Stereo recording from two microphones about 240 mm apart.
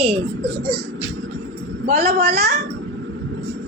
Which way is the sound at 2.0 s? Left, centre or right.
Right.